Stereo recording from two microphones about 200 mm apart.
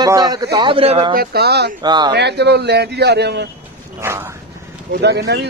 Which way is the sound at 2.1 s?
55° right (ahead or behind).